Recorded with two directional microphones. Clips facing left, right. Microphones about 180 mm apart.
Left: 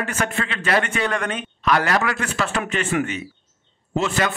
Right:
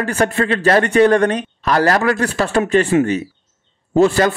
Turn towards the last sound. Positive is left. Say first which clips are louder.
# right 9 dB
turn(degrees=-35)  # may be behind; listen again after turning